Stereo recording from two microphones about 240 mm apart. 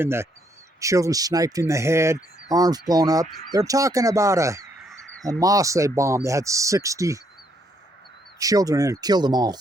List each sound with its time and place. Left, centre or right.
0.0 s speech: centre
8.4 s speech: centre